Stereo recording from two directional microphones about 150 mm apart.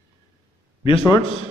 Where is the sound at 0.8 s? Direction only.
40° left (ahead or behind).